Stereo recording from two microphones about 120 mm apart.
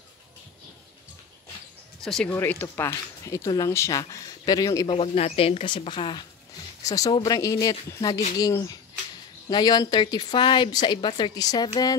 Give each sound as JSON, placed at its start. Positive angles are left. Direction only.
{"t": 2.0, "sound": "speech", "side_deg": 5}
{"t": 2.3, "sound": "speech", "side_deg": 15}
{"t": 3.3, "sound": "speech", "side_deg": 30}
{"t": 4.8, "sound": "speech", "side_deg": 55}
{"t": 6.8, "sound": "speech", "side_deg": 30}